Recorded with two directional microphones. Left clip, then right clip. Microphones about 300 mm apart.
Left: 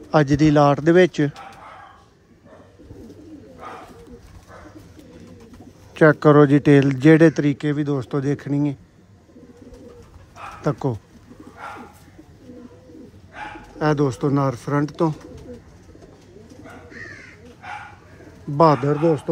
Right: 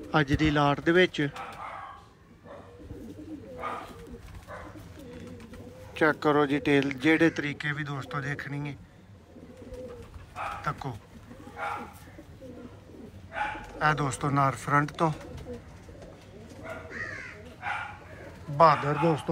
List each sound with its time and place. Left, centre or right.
0.2 s speech: left
5.9 s speech: left
10.6 s speech: left
13.7 s speech: centre
18.6 s speech: left